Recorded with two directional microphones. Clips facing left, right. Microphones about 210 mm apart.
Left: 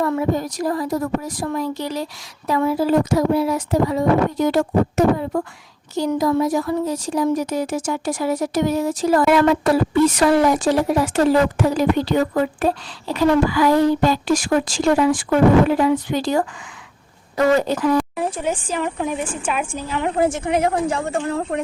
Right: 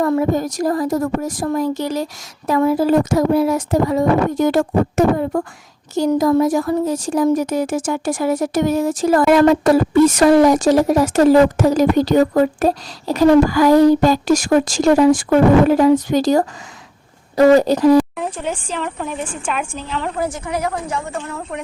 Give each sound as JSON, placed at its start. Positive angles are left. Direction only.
{"t": 0.0, "sound": "speech", "side_deg": -45}
{"t": 18.2, "sound": "a woman's voice", "side_deg": 10}
{"t": 20.1, "sound": "a woman's voice", "side_deg": 25}